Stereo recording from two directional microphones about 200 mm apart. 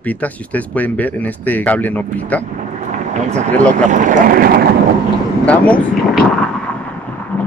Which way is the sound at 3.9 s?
40° right (ahead or behind).